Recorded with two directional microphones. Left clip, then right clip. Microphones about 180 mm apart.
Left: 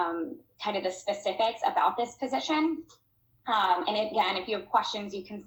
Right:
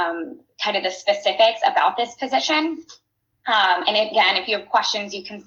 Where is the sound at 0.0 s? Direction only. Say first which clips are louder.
Right 6 dB; 45° right (ahead or behind).